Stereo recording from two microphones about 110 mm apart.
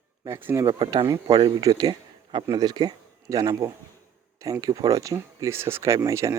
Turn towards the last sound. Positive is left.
turn(degrees=-30)  # may be behind; listen again after turning